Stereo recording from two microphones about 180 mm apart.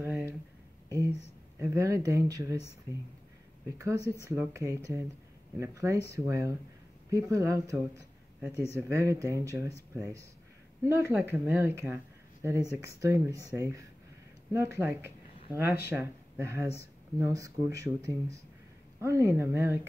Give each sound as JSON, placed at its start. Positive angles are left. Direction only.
{"t": 0.0, "sound": "a sound", "side_deg": -15}
{"t": 1.6, "sound": "speech", "side_deg": -15}
{"t": 3.7, "sound": "speech", "side_deg": -15}
{"t": 8.7, "sound": "speech", "side_deg": -15}